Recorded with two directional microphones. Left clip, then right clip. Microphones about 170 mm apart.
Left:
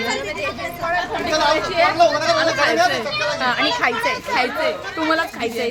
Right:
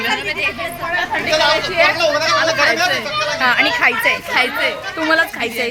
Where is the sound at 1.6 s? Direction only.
90° left.